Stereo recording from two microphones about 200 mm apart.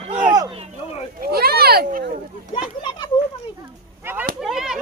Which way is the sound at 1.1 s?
50° right (ahead or behind).